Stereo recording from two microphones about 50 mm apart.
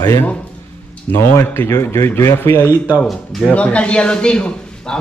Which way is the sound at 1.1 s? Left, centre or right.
Left.